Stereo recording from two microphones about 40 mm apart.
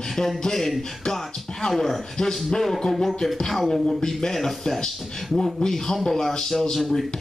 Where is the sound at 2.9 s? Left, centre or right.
Centre.